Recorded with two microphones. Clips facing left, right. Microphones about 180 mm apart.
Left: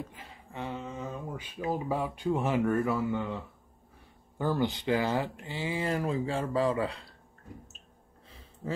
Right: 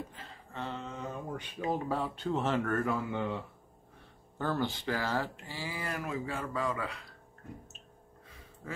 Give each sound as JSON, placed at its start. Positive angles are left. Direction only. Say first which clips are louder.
{"t": 0.1, "sound": "a sound", "louder": "left 1 dB", "side_deg": 15}
{"t": 1.7, "sound": "speech", "louder": "left 2 dB", "side_deg": 15}
{"t": 4.4, "sound": "speech", "louder": "left 4 dB", "side_deg": 15}